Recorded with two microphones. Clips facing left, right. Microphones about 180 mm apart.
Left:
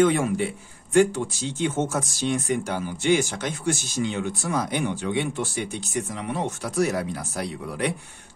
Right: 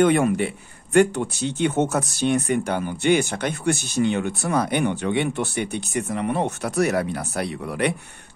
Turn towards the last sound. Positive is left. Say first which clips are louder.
# right 3 dB
turn(degrees=-65)  # may be behind; listen again after turning